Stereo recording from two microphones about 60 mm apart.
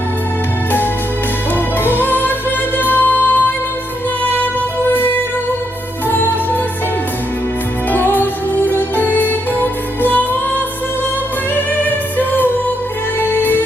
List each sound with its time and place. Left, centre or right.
2.0 s music: left
7.9 s music: left
11.5 s music: left